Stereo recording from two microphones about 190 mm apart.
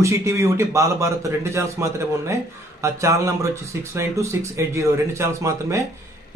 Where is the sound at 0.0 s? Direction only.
15° right (ahead or behind).